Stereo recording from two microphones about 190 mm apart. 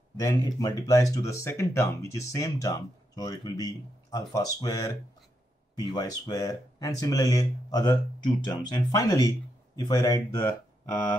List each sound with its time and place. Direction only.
0.2 s speech: 20° left (ahead or behind)